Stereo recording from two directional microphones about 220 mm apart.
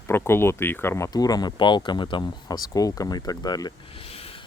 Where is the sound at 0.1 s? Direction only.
10° left (ahead or behind).